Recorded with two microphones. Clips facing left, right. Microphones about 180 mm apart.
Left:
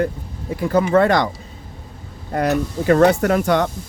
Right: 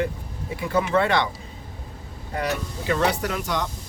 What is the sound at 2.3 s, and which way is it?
Speech, 45° left (ahead or behind).